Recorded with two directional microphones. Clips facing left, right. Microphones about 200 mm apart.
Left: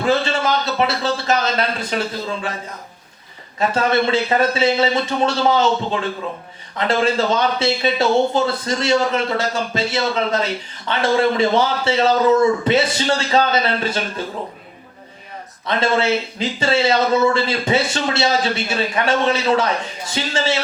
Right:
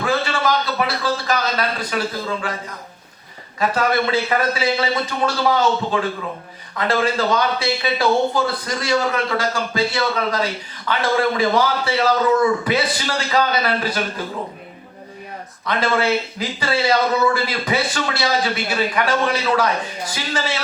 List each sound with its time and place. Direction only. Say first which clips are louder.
0.0 s speech: left 2 dB; 25° left (ahead or behind)
3.6 s speech: left 1 dB; 25° left (ahead or behind)
15.6 s speech: left 1 dB; 25° left (ahead or behind)